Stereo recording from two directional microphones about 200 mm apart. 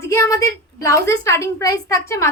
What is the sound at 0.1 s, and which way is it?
A woman's voice, 15° left (ahead or behind).